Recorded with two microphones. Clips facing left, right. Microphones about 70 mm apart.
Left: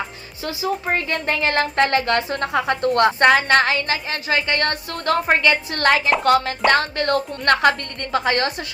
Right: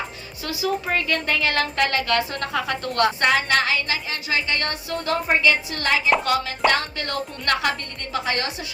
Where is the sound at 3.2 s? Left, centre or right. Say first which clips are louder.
Left 5 dB; left.